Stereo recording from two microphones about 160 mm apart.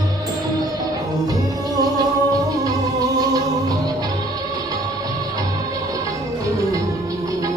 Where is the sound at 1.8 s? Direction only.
20° right (ahead or behind).